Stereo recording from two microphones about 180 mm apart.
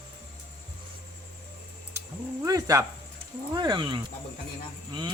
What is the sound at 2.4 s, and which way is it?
Speech, 20° right (ahead or behind).